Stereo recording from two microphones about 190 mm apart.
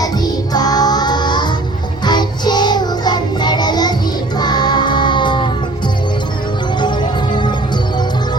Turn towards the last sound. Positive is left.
turn(degrees=25)  # may be behind; listen again after turning